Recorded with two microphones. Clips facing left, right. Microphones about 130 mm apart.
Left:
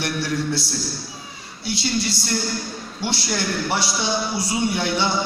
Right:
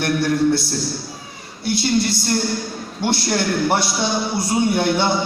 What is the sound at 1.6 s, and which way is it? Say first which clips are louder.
A man's voice: right 5 dB; 55° right (ahead or behind).